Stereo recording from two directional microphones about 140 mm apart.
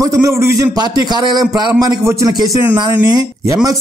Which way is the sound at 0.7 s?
30° right (ahead or behind).